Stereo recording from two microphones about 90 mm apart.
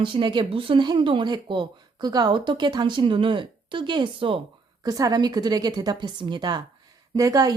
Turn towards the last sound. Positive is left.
turn(degrees=-40)  # may be behind; listen again after turning